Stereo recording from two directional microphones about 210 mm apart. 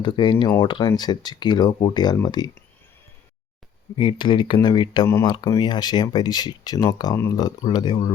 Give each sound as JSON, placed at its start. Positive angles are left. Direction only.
{"t": 0.0, "sound": "speech", "side_deg": 20}
{"t": 3.9, "sound": "speech", "side_deg": 25}